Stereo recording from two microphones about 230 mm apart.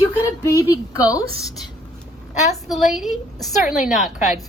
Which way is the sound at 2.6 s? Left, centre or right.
Centre.